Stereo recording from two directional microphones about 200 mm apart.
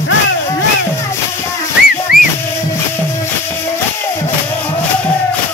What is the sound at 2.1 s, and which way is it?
Music, 50° left (ahead or behind).